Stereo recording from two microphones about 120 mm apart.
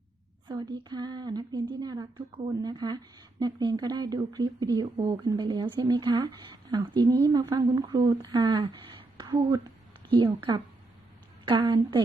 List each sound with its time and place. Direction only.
0.5 s a woman's voice: 35° right (ahead or behind)